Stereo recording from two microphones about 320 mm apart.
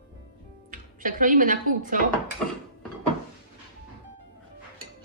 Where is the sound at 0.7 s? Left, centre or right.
Right.